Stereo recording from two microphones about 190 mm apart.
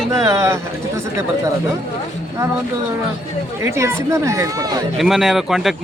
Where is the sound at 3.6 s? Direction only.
15° right (ahead or behind).